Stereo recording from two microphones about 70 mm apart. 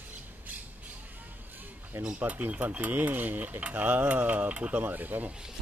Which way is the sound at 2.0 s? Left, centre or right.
Centre.